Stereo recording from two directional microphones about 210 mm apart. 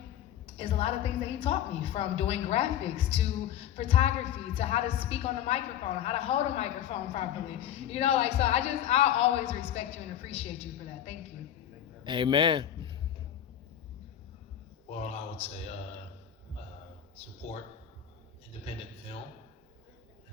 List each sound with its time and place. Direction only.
0.4 s a woman's voice: 25° left (ahead or behind)
12.0 s a man's voice: 20° right (ahead or behind)
14.8 s a man's voice: 30° left (ahead or behind)
17.5 s a woman's voice: 30° left (ahead or behind)